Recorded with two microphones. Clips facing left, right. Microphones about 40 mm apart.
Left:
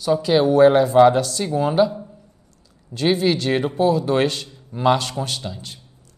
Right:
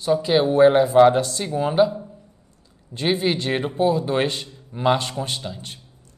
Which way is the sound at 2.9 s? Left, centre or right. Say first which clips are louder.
Left 3 dB; right.